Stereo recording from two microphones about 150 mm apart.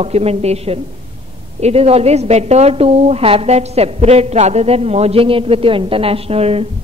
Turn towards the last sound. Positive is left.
turn(degrees=-40)  # may be behind; listen again after turning